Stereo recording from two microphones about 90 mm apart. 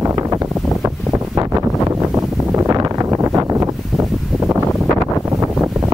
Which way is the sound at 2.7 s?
40° right (ahead or behind).